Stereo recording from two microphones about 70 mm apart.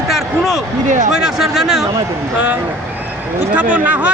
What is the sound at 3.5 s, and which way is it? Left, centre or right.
Speech, right.